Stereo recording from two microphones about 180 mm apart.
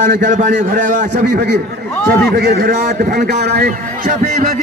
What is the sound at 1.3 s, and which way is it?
Speech, 75° right (ahead or behind).